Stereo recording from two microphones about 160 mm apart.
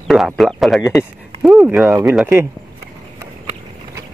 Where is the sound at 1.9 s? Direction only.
20° right (ahead or behind).